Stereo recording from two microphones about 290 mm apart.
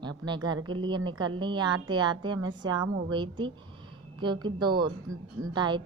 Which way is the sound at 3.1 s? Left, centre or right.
Centre.